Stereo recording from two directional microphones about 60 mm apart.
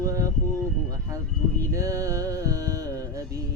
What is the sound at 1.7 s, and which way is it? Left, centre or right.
Music, right.